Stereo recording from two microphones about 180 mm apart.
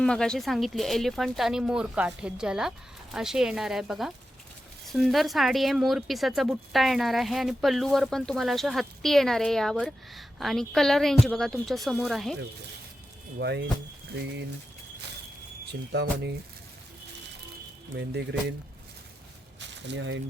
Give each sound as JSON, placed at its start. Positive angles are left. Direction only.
{"t": 0.0, "sound": "speech", "side_deg": 5}
{"t": 13.4, "sound": "speech", "side_deg": -70}
{"t": 15.7, "sound": "speech", "side_deg": -70}
{"t": 17.9, "sound": "speech", "side_deg": -75}
{"t": 19.5, "sound": "a sound", "side_deg": -80}